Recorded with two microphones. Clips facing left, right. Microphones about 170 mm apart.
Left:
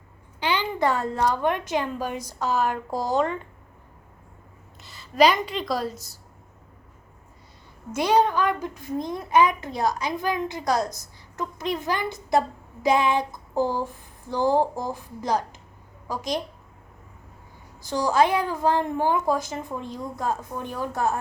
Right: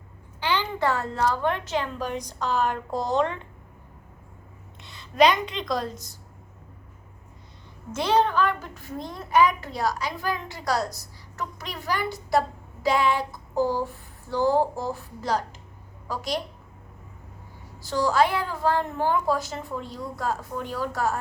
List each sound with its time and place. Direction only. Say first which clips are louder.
0.3 s a woman's voice: left 1 dB; 15° left (ahead or behind)
4.8 s speech: left 1 dB; centre (ahead or behind)
7.9 s a child's voice: left 1 dB; 10° left (ahead or behind)
17.8 s a woman's voice: left 1 dB; 15° left (ahead or behind)